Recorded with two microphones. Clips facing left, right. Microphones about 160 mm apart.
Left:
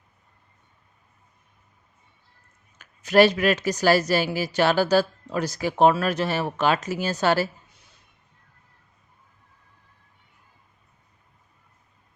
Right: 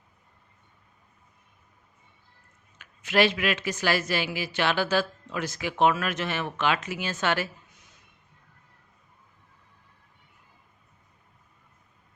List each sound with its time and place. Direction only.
2.7 s speech: 40° left (ahead or behind)